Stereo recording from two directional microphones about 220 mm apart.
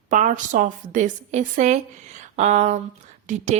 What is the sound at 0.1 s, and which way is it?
A woman's voice, 35° right (ahead or behind).